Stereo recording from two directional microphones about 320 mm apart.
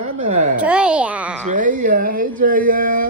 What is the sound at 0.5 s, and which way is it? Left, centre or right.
Speech, centre.